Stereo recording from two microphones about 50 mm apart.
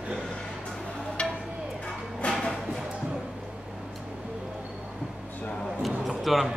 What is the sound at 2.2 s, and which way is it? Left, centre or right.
Music, left.